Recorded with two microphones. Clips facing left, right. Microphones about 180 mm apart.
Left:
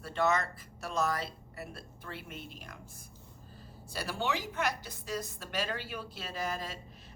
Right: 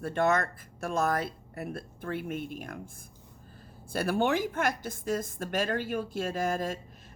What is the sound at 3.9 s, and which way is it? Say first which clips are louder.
Speech: right 8 dB; 55° right (ahead or behind).